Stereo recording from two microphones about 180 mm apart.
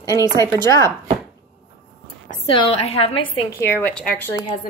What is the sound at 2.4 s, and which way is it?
A woman's voice, 30° left (ahead or behind).